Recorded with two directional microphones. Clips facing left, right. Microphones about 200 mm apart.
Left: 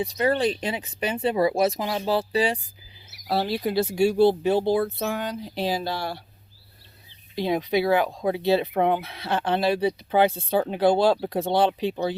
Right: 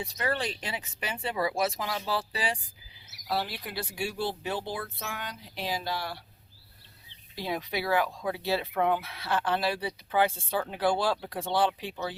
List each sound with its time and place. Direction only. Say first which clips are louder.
0.0 s speech: left 9 dB; 20° left (ahead or behind)
7.3 s speech: left 9 dB; 20° left (ahead or behind)